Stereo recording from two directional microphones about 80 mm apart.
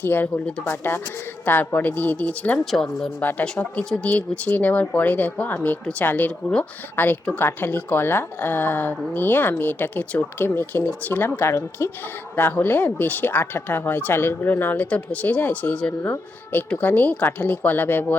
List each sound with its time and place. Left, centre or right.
0.0 s speech: left
2.6 s speech: centre
3.2 s speech: left
12.4 s speech: left